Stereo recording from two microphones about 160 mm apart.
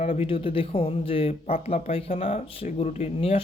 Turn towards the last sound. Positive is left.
turn(degrees=40)  # may be behind; listen again after turning